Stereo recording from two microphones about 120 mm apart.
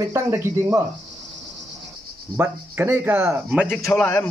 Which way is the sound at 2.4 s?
20° right (ahead or behind).